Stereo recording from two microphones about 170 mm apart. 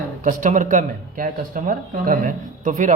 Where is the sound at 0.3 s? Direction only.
50° right (ahead or behind).